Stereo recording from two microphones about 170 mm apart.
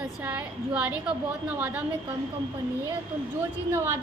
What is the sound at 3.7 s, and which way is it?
Child singing, 15° right (ahead or behind).